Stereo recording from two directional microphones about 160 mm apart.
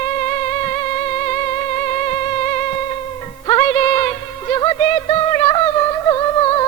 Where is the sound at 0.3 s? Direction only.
25° left (ahead or behind).